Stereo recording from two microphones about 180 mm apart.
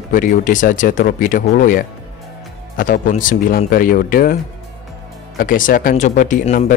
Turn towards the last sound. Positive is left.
turn(degrees=45)  # may be behind; listen again after turning